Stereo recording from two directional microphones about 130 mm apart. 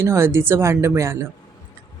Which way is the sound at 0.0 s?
20° right (ahead or behind).